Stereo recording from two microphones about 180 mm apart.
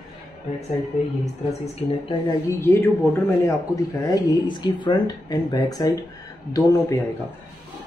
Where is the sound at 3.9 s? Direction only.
20° left (ahead or behind).